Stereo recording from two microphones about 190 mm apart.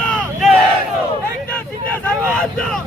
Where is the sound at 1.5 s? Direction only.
10° left (ahead or behind).